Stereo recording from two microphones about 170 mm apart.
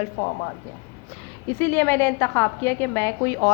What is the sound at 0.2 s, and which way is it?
Speech, 55° left (ahead or behind).